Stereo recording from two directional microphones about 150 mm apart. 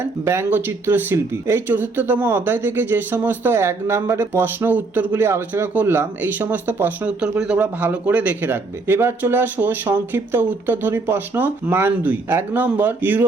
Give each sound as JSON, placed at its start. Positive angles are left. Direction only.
{"t": 0.0, "sound": "speech", "side_deg": -15}